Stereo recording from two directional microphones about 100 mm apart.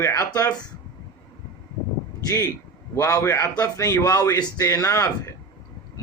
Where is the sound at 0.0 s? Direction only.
30° left (ahead or behind).